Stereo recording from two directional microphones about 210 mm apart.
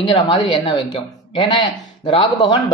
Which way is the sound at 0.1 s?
25° left (ahead or behind).